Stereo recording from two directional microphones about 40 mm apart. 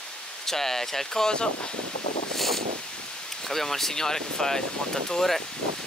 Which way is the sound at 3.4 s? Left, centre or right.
Centre.